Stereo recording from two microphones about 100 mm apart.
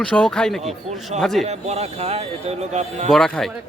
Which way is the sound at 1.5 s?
90° right.